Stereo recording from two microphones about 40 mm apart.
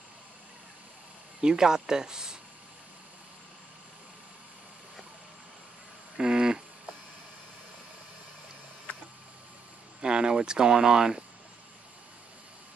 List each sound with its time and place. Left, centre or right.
1.4 s speech: centre
6.1 s a sound: centre
10.0 s speech: right